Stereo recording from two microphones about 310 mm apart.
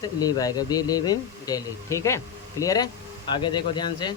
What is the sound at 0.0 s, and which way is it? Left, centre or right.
Speech, centre.